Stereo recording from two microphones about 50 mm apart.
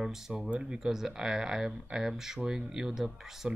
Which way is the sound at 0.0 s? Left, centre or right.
Centre.